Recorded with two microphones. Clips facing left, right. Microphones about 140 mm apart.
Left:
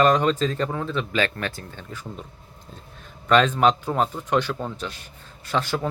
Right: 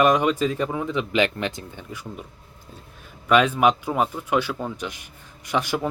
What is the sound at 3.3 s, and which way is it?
Speech, 10° right (ahead or behind).